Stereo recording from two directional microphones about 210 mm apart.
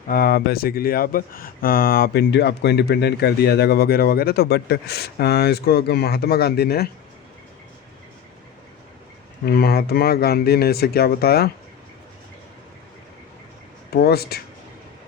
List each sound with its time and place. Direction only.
0.1 s speech: 45° left (ahead or behind)
9.5 s speech: 45° left (ahead or behind)
13.9 s speech: 50° left (ahead or behind)